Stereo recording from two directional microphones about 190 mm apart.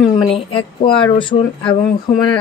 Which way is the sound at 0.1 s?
25° left (ahead or behind).